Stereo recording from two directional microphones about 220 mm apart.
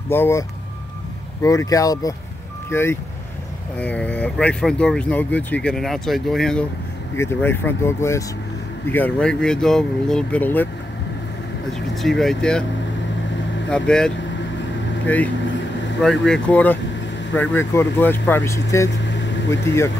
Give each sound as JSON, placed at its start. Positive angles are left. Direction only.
{"t": 0.1, "sound": "speech", "side_deg": 10}
{"t": 11.9, "sound": "speech", "side_deg": 0}
{"t": 13.7, "sound": "speech", "side_deg": 5}